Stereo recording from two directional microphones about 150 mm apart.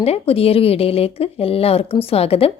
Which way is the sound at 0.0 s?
40° left (ahead or behind).